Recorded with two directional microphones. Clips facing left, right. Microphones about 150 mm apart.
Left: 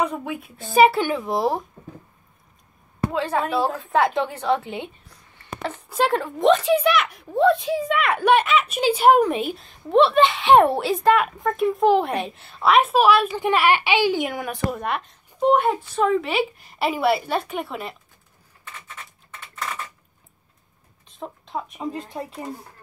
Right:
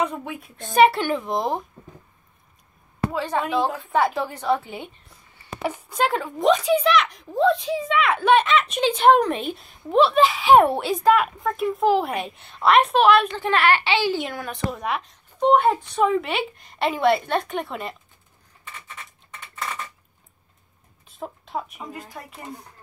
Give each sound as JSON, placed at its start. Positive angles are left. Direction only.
{"t": 0.0, "sound": "speech", "side_deg": 5}
{"t": 3.1, "sound": "a woman's voice", "side_deg": 0}
{"t": 14.5, "sound": "speech", "side_deg": 0}
{"t": 21.1, "sound": "a sound", "side_deg": 0}
{"t": 22.1, "sound": "speech", "side_deg": 30}